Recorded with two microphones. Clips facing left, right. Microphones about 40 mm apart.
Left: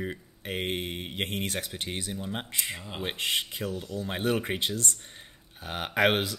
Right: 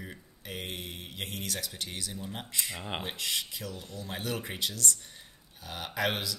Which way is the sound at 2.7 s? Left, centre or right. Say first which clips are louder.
Right 2 dB; right.